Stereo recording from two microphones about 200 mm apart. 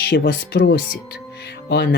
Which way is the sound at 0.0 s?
55° left (ahead or behind).